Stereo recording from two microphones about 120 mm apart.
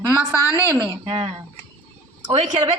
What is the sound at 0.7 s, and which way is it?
Speech, 40° right (ahead or behind).